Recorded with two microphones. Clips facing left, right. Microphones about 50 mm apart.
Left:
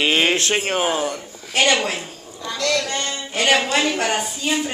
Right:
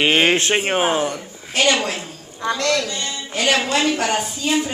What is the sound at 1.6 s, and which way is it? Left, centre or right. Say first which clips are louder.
Speech: even; centre.